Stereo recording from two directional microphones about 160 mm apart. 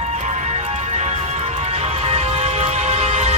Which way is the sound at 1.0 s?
40° right (ahead or behind).